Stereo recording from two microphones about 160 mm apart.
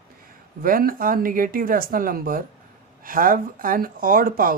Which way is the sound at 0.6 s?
65° right (ahead or behind).